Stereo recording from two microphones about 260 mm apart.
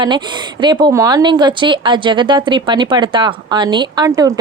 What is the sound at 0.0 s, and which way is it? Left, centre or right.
Speech, centre.